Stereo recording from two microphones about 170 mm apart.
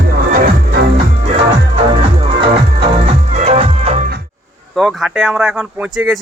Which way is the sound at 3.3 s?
40° right (ahead or behind).